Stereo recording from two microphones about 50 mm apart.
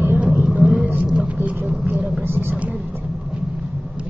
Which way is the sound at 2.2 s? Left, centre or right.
Right.